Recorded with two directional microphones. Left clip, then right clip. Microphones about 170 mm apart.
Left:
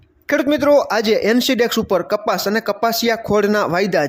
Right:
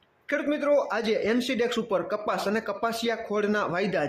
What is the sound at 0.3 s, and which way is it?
Speech, 45° left (ahead or behind).